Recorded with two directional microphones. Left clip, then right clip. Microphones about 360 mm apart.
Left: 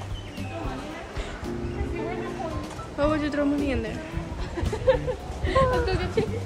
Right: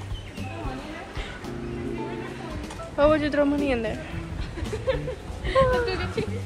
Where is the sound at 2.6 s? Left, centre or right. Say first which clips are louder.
Right 7 dB; centre.